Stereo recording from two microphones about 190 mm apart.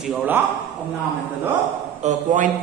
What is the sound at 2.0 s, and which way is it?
Speech, 40° right (ahead or behind).